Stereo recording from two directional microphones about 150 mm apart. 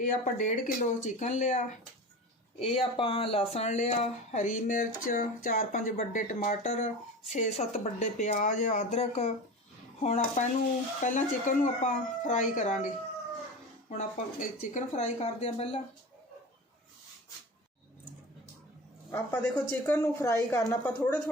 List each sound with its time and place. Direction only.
0.0 s speech: 60° left (ahead or behind)
2.6 s speech: 40° left (ahead or behind); by 12.9 s 55° left (ahead or behind)
14.3 s speech: 55° left (ahead or behind)
19.1 s a woman's voice: 10° left (ahead or behind)